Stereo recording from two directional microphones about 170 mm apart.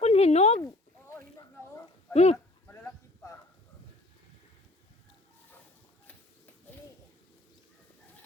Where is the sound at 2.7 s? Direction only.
15° left (ahead or behind).